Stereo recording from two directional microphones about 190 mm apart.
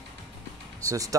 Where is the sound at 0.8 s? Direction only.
15° right (ahead or behind).